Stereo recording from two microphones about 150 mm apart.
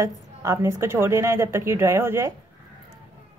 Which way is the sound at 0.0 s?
20° right (ahead or behind).